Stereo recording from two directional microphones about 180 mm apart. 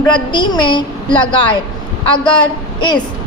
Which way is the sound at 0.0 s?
25° left (ahead or behind).